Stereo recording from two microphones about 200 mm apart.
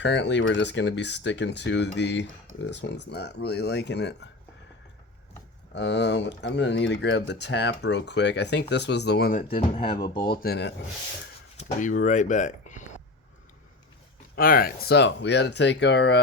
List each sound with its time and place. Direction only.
0.0 s speech: 60° left (ahead or behind)
5.7 s speech: 60° left (ahead or behind)
11.5 s speech: 40° left (ahead or behind)
14.3 s speech: 50° left (ahead or behind)